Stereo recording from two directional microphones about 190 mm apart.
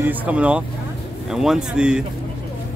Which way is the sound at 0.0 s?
10° right (ahead or behind).